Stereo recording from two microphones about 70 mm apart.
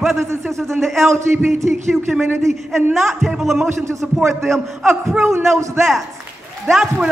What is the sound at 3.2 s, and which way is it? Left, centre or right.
Speech, centre.